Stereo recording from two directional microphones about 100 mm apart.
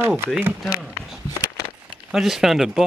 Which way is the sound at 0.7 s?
5° right (ahead or behind).